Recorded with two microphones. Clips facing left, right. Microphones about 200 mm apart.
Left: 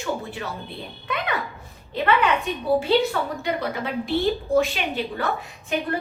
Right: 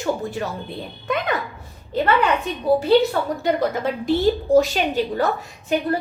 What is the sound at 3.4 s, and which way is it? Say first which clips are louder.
A woman's voice: right 6 dB; 40° right (ahead or behind).